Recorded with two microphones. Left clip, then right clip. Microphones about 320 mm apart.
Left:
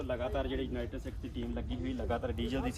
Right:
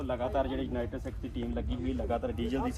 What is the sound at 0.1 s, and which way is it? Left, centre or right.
Speech, centre.